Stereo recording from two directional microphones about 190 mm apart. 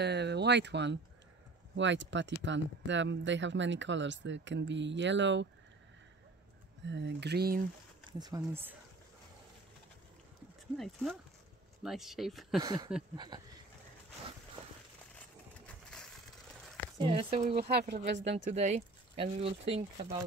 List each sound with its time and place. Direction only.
0.0 s speech: 60° right (ahead or behind)
6.9 s speech: 65° right (ahead or behind)
8.1 s speech: 20° right (ahead or behind)
10.8 s speech: 5° left (ahead or behind)
12.6 s speech: 20° right (ahead or behind)
15.1 s a sound: 5° left (ahead or behind)
17.0 s speech: 30° right (ahead or behind)
17.6 s speech: 60° right (ahead or behind)
18.0 s speech: 70° right (ahead or behind)
18.4 s speech: 40° right (ahead or behind)